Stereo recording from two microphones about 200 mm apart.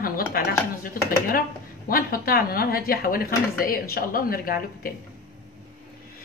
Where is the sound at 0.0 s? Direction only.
45° left (ahead or behind).